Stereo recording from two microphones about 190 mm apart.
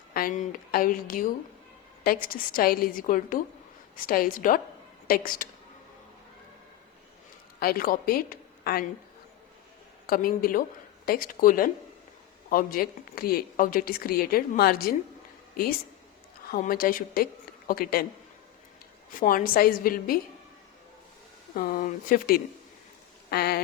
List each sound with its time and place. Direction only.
0.1 s speech: 50° left (ahead or behind)
7.6 s a woman's voice: 50° left (ahead or behind)
10.1 s a woman's voice: 50° left (ahead or behind)
16.5 s speech: 50° left (ahead or behind)
19.2 s speech: 50° left (ahead or behind)
21.5 s speech: 45° left (ahead or behind)